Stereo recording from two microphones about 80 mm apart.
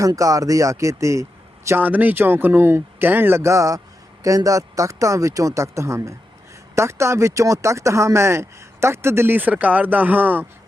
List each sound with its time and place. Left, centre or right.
0.2 s a man's voice: right
1.7 s speech: right